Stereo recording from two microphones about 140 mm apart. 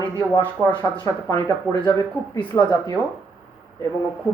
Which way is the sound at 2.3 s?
30° left (ahead or behind).